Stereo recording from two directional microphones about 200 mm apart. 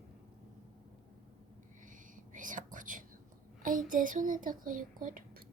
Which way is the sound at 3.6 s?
40° right (ahead or behind).